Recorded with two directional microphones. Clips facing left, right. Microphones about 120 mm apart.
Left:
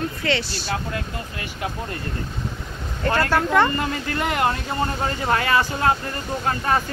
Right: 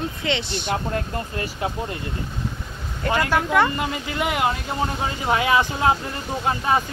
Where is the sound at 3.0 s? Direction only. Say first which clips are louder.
Left 1 dB; 10° right (ahead or behind).